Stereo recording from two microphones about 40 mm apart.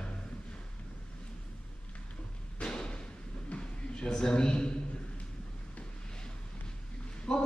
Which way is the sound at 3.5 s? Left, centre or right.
Left.